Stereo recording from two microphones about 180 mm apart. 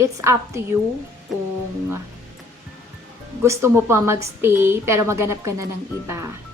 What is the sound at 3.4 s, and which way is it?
A woman's voice, 15° right (ahead or behind).